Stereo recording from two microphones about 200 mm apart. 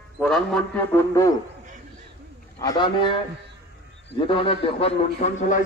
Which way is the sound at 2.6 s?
20° left (ahead or behind).